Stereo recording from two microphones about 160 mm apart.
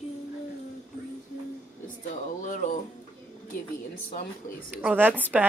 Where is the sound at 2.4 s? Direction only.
50° left (ahead or behind).